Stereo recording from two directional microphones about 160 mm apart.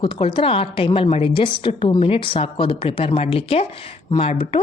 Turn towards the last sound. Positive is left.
turn(degrees=40)  # may be behind; listen again after turning